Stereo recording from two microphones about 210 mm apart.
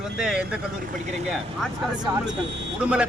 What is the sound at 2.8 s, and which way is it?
Speech, 5° right (ahead or behind).